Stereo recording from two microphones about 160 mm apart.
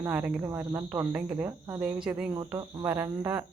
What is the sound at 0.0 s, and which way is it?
Speech, 10° right (ahead or behind).